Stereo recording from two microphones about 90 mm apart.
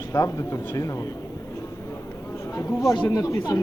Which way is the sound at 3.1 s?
35° left (ahead or behind).